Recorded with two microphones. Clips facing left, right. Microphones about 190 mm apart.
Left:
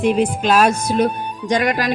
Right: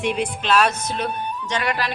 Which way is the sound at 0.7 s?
10° left (ahead or behind).